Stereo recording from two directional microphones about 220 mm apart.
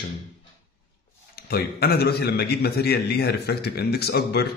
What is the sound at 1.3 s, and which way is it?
A man's voice, 45° left (ahead or behind).